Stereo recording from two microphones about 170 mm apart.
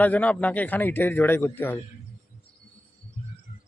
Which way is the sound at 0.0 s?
10° left (ahead or behind).